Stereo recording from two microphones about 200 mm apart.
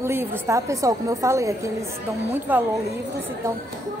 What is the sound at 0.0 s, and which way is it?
A woman's voice, 10° right (ahead or behind).